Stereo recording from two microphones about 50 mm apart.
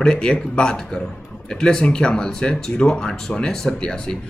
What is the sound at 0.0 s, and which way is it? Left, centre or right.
Speech, centre.